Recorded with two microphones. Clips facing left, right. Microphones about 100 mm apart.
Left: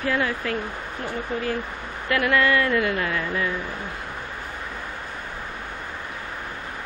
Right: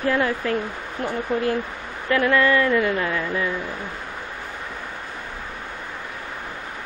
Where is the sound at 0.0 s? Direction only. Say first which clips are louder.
Right 3 dB; 30° right (ahead or behind).